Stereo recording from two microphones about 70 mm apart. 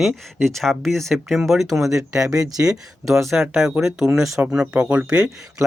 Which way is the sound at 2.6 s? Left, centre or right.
Centre.